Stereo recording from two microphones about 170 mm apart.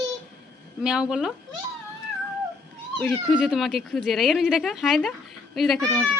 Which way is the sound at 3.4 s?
Centre (ahead or behind).